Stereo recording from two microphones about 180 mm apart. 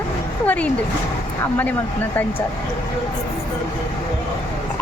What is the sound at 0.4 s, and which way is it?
Speech, 10° left (ahead or behind).